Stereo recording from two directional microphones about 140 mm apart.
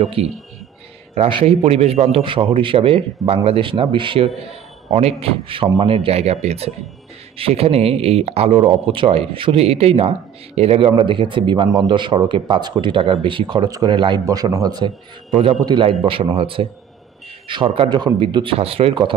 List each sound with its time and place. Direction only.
0.0 s a man's voice: 45° right (ahead or behind)
4.9 s a man's voice: 50° right (ahead or behind)